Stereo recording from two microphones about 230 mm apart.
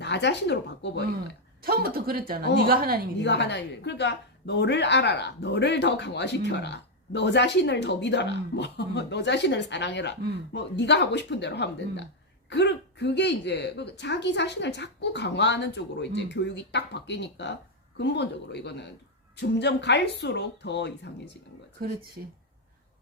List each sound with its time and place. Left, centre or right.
0.0 s a woman's voice: left
1.6 s speech: right
3.2 s a woman's voice: left